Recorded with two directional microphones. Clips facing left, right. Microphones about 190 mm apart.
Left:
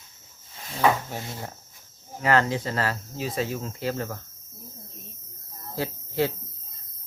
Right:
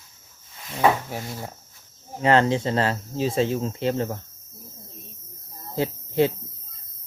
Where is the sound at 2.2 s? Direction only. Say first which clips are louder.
Right 4 dB; 25° right (ahead or behind).